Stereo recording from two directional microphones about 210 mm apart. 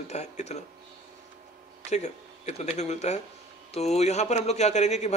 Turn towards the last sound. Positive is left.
turn(degrees=35)  # may be behind; listen again after turning